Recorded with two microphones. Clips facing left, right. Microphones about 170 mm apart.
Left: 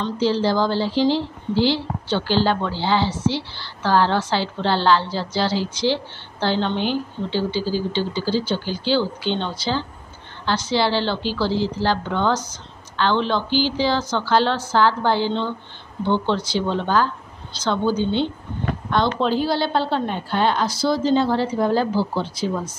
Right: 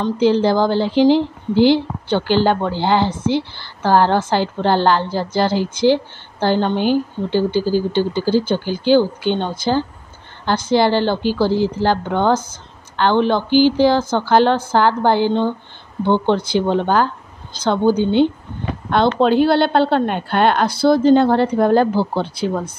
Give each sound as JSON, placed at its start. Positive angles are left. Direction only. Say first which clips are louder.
{"t": 0.0, "sound": "a woman's voice", "louder": "right 5 dB", "side_deg": -55}